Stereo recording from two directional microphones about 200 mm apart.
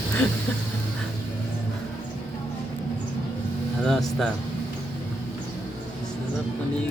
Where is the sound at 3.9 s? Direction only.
Centre (ahead or behind).